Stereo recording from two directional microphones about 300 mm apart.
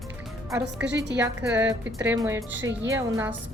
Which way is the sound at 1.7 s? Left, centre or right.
Centre.